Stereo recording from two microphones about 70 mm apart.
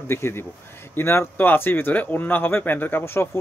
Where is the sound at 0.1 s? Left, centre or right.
Left.